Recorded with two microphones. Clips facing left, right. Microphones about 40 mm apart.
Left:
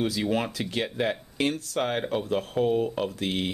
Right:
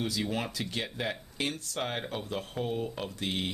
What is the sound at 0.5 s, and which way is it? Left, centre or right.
Speech, left.